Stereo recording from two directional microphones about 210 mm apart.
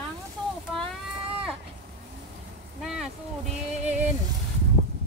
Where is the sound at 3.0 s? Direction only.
35° right (ahead or behind).